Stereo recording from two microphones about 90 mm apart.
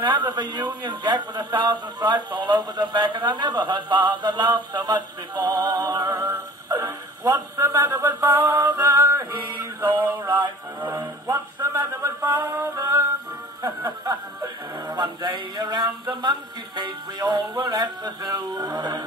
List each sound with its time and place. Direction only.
0.0 s a man's voice: 55° right (ahead or behind)
6.7 s a sound: 40° right (ahead or behind)
8.4 s music: 30° right (ahead or behind)
8.6 s male singing: 45° right (ahead or behind)
13.6 s a man's voice: 45° right (ahead or behind)